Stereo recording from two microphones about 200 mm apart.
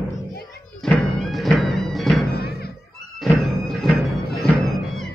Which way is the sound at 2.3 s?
50° left (ahead or behind).